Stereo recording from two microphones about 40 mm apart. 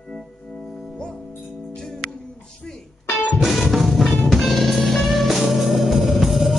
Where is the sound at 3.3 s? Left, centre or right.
Centre.